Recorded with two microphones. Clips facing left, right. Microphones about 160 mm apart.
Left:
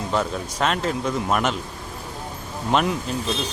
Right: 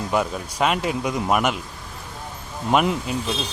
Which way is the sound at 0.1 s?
10° right (ahead or behind).